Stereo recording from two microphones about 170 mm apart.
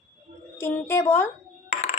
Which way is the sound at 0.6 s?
15° left (ahead or behind).